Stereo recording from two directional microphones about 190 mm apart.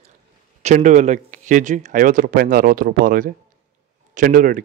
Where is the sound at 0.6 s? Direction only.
35° right (ahead or behind).